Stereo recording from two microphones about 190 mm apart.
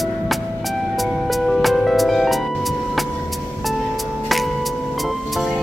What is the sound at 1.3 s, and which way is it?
Music, centre (ahead or behind).